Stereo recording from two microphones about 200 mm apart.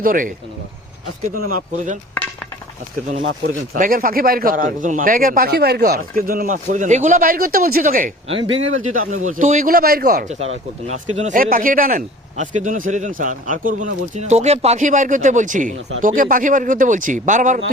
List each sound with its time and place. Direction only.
0.0 s a man's voice: 45° right (ahead or behind)
1.4 s speech: 40° right (ahead or behind)
3.2 s speech: 75° right (ahead or behind)
3.8 s a man's voice: 45° right (ahead or behind)